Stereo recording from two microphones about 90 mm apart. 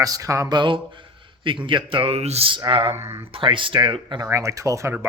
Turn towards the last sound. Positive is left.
turn(degrees=-30)  # may be behind; listen again after turning